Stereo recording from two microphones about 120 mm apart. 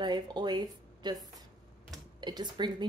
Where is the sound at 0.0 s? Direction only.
35° right (ahead or behind).